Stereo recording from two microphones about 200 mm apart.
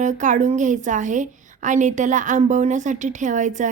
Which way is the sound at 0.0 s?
40° right (ahead or behind).